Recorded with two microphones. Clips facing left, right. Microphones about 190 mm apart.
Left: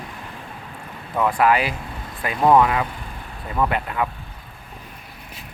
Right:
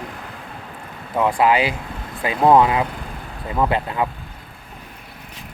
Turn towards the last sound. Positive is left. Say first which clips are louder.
# right 2 dB
turn(degrees=-25)  # may be behind; listen again after turning